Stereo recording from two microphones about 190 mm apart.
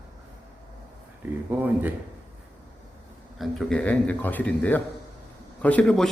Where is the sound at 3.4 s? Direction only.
5° left (ahead or behind).